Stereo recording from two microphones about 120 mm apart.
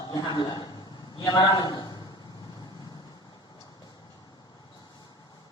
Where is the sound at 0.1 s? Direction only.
35° left (ahead or behind).